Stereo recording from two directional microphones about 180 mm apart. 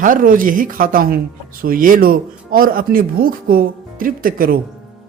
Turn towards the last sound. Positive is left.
turn(degrees=-50)  # may be behind; listen again after turning